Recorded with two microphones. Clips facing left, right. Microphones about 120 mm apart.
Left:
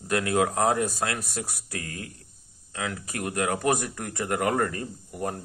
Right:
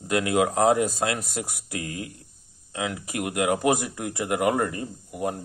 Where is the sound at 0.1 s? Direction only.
20° right (ahead or behind).